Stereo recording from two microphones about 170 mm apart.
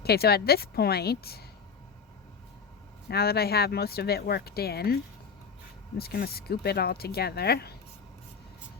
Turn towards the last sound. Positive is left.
turn(degrees=70)  # may be behind; listen again after turning